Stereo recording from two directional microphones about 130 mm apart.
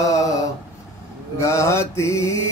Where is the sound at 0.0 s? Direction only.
25° left (ahead or behind).